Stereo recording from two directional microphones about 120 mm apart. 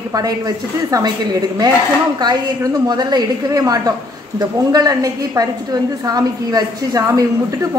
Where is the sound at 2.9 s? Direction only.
35° right (ahead or behind).